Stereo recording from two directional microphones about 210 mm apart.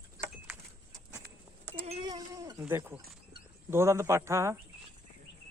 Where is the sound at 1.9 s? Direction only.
20° right (ahead or behind).